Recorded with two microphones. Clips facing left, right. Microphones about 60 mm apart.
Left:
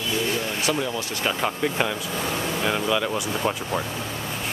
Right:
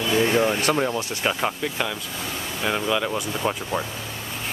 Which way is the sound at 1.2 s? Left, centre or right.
Centre.